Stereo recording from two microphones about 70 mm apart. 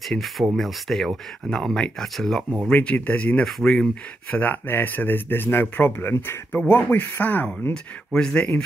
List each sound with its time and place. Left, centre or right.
0.1 s speech: centre
2.7 s speech: left
3.4 s speech: centre
4.3 s speech: left
7.7 s speech: centre